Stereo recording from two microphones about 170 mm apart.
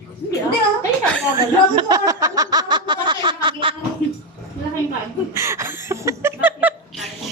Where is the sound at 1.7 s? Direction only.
25° right (ahead or behind).